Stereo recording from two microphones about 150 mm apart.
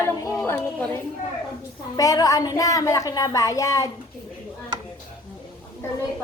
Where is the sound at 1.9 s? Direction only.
25° left (ahead or behind).